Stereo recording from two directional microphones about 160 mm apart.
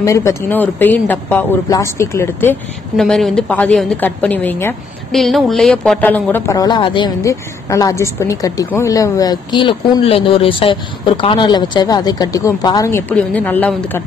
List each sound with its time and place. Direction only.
0.0 s speech: 20° left (ahead or behind)
3.0 s speech: centre (ahead or behind)
5.1 s speech: centre (ahead or behind); by 7.1 s 30° left (ahead or behind)
7.2 s a woman's voice: 20° left (ahead or behind)
13.1 s speech: 10° left (ahead or behind)